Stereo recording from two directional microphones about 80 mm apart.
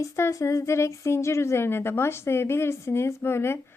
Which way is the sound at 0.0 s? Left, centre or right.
Left.